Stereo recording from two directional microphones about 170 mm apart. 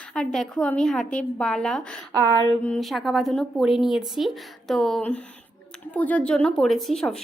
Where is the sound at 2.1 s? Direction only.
25° right (ahead or behind).